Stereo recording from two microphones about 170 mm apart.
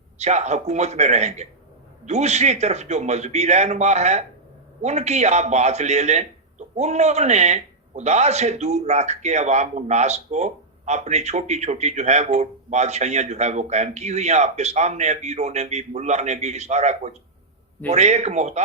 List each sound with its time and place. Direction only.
0.2 s a man's voice: 40° right (ahead or behind)